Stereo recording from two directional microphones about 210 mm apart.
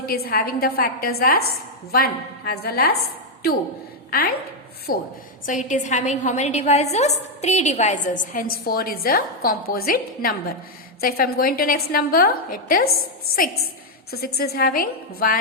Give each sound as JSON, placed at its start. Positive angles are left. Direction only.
{"t": 0.0, "sound": "a woman's voice", "side_deg": 45}
{"t": 4.1, "sound": "a woman's voice", "side_deg": 45}
{"t": 14.3, "sound": "a woman's voice", "side_deg": 45}